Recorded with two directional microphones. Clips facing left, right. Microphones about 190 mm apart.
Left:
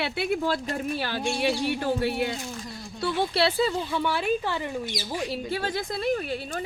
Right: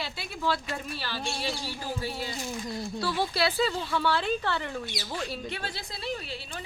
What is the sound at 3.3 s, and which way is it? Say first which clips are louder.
Speech: left 5 dB; 30° left (ahead or behind).